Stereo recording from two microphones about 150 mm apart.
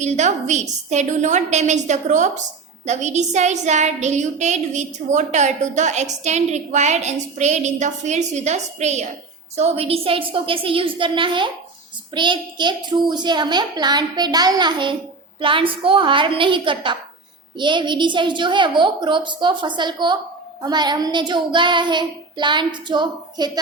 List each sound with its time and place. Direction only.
0.0 s a woman's voice: 50° right (ahead or behind)
9.6 s child singing: 45° right (ahead or behind)
13.1 s a child's voice: 30° right (ahead or behind)
15.4 s child singing: 35° right (ahead or behind)